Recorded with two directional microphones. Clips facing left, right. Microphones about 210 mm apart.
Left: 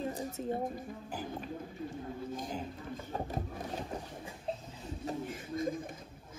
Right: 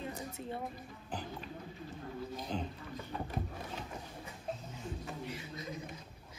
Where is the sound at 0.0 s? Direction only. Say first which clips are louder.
Left 6 dB; 45° left (ahead or behind).